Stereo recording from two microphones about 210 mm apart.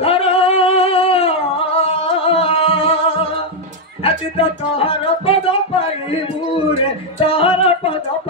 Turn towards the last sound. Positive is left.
turn(degrees=25)  # may be behind; listen again after turning